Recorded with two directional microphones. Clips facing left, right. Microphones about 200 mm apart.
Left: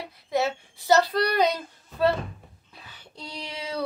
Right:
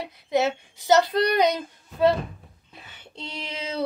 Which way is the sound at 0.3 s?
20° right (ahead or behind).